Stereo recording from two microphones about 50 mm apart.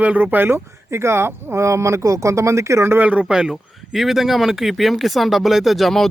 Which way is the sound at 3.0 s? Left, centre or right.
Right.